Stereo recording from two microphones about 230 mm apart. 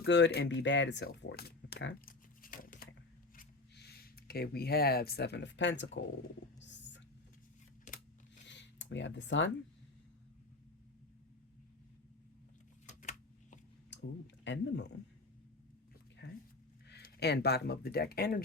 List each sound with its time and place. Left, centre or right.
0.0 s speech: left
6.6 s whispering: left
7.9 s scissors: left
8.4 s a sound: left
12.9 s a sound: left
13.9 s a sound: left
14.4 s speech: left
16.2 s dog: left
16.9 s speech: left